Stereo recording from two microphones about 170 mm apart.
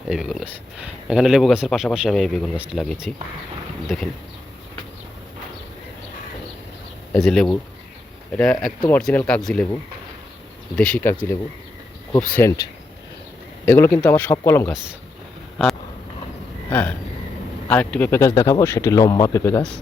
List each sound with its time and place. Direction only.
0.1 s speech: centre (ahead or behind)
7.1 s speech: 5° left (ahead or behind)
10.8 s speech: 5° left (ahead or behind)
13.7 s speech: 15° left (ahead or behind)
16.6 s speech: 10° left (ahead or behind)